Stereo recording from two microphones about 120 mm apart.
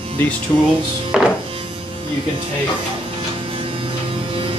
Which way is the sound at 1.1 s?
5° right (ahead or behind).